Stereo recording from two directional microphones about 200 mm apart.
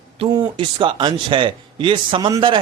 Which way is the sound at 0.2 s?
25° right (ahead or behind).